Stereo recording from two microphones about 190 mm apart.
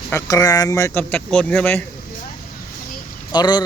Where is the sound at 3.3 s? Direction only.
20° left (ahead or behind).